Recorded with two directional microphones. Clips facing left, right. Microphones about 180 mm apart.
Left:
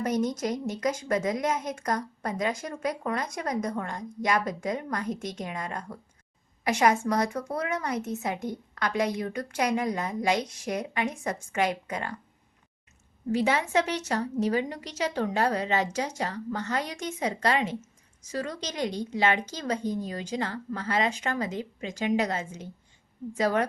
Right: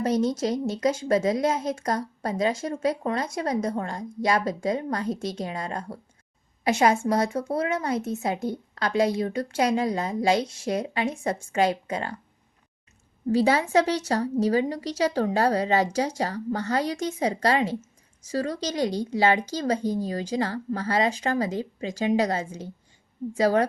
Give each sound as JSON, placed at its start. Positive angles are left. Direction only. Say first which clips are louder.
{"t": 0.0, "sound": "a woman's voice", "louder": "right 4 dB", "side_deg": -30}
{"t": 13.3, "sound": "speech", "louder": "right 4 dB", "side_deg": -35}